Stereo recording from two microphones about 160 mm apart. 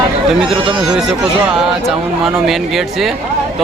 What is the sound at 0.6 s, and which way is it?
Speech, 30° right (ahead or behind).